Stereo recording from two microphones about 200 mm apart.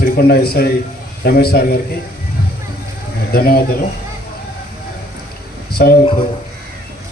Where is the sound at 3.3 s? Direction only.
50° left (ahead or behind).